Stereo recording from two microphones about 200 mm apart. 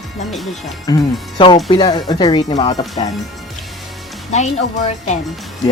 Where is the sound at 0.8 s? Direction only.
20° left (ahead or behind).